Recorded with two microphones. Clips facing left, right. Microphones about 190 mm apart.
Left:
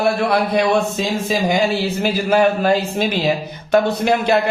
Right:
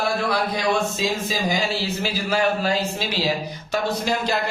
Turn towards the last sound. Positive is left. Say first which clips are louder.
# left 7 dB
turn(degrees=60)  # may be behind; listen again after turning